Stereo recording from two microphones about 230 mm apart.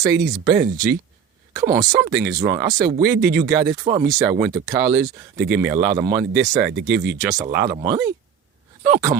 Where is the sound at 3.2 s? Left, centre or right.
Right.